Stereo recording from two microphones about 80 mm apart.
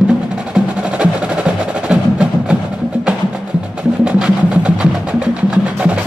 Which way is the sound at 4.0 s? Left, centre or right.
Centre.